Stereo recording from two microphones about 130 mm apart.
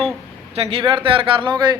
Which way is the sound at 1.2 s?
35° right (ahead or behind).